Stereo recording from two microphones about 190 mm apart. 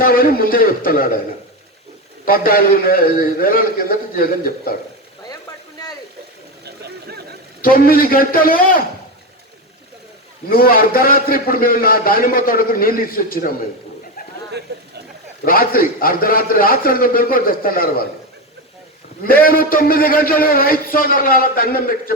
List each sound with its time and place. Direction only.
0.0 s a man's voice: 50° left (ahead or behind)
2.2 s a man's voice: 50° left (ahead or behind)
6.7 s chatter: 60° right (ahead or behind)
7.6 s a man's voice: 50° left (ahead or behind)
10.5 s a man's voice: 50° left (ahead or behind)
15.4 s a man's voice: 50° left (ahead or behind)
19.2 s a man's voice: 50° left (ahead or behind)